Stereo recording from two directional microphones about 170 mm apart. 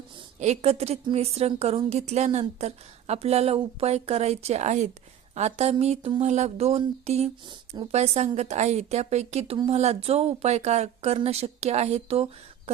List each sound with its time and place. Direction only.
0.3 s a woman's voice: 40° right (ahead or behind)